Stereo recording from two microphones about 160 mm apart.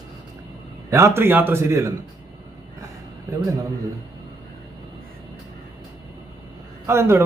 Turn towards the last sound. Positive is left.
turn(degrees=-15)  # may be behind; listen again after turning